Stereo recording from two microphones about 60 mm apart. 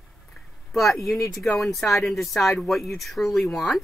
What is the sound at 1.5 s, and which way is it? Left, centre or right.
Speech, centre.